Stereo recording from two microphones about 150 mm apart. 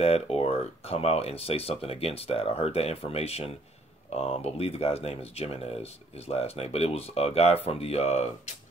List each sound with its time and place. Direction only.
0.0 s speech: 40° left (ahead or behind)